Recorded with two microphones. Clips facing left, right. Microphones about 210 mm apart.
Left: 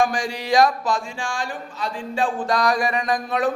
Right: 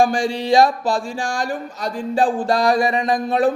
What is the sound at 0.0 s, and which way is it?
Speech, 30° right (ahead or behind).